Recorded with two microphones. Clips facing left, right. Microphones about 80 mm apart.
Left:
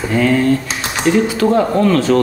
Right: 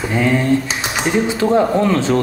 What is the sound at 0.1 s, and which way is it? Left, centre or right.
Speech, centre.